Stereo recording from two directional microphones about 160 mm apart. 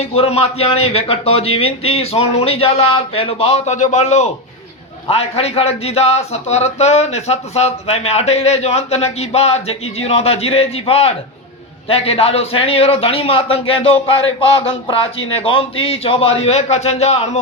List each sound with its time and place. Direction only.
0.0 s a man's voice: 40° left (ahead or behind)